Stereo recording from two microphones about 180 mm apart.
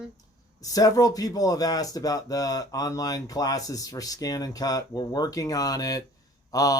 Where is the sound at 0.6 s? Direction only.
20° left (ahead or behind).